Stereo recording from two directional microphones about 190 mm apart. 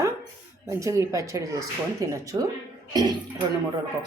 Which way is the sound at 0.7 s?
15° right (ahead or behind).